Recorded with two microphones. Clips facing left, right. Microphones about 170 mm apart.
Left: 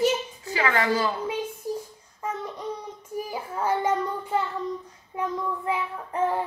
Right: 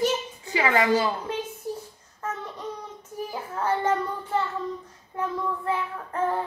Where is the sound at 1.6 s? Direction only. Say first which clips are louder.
Left 2 dB; 10° left (ahead or behind).